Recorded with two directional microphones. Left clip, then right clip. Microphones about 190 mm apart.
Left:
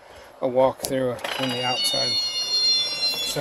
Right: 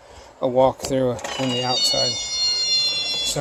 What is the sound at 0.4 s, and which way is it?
Speech, 20° right (ahead or behind).